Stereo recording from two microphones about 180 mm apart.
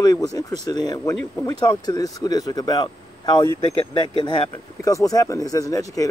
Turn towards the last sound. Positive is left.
turn(degrees=20)  # may be behind; listen again after turning